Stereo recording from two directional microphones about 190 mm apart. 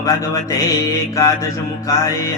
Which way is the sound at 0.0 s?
15° left (ahead or behind).